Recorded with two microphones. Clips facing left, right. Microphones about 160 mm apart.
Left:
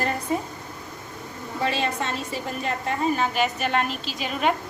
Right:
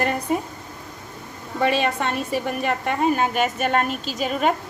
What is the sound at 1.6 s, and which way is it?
A woman's voice, 65° right (ahead or behind).